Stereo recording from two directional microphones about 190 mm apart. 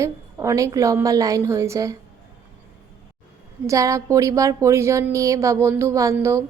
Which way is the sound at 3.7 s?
15° right (ahead or behind).